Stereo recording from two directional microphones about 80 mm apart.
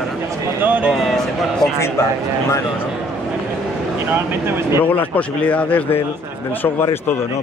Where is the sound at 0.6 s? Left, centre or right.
Centre.